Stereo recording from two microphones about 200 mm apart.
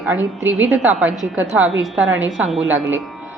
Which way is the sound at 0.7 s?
10° right (ahead or behind).